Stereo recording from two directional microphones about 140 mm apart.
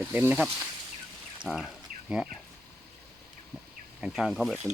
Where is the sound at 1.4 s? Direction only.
Centre (ahead or behind).